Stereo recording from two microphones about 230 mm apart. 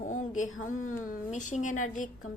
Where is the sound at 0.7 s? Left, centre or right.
Left.